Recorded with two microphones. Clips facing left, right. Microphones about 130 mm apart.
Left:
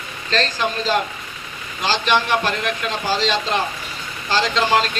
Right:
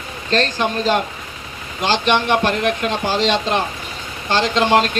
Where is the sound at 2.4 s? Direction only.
50° right (ahead or behind).